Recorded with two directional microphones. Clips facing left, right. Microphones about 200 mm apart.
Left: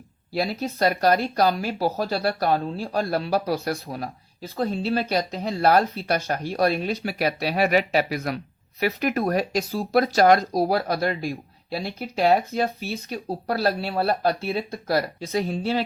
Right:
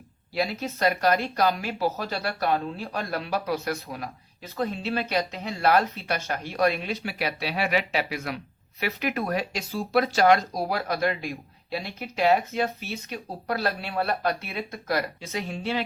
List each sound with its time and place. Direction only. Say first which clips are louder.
0.3 s speech: left 3 dB; 35° left (ahead or behind)